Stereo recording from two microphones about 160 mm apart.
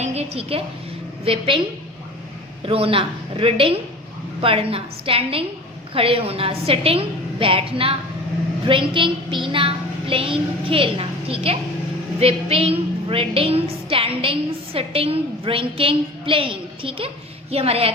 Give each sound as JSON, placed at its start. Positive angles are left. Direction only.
{"t": 0.0, "sound": "a woman's voice", "side_deg": -40}
{"t": 2.6, "sound": "a woman's voice", "side_deg": -35}